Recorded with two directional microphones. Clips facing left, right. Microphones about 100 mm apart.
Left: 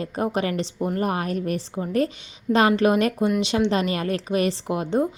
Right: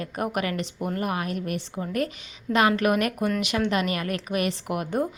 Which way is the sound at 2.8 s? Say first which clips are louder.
Left 4 dB; 30° left (ahead or behind).